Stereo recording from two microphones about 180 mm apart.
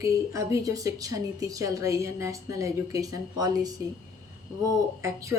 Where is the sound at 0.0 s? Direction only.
20° right (ahead or behind).